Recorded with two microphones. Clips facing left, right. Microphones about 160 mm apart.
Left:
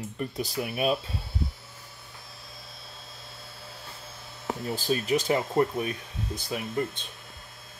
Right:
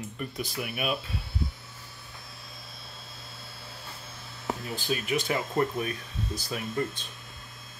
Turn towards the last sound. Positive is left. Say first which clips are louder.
# left 1 dB
turn(degrees=15)  # may be behind; listen again after turning